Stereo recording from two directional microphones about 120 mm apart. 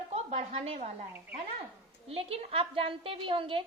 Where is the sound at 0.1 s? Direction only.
60° right (ahead or behind).